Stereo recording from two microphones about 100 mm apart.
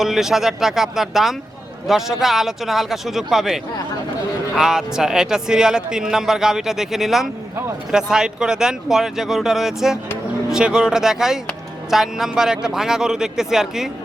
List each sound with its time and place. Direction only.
0.0 s speech: 5° right (ahead or behind)